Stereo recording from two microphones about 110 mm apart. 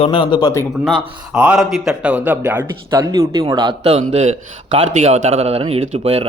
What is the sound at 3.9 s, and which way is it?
Speech, 85° right.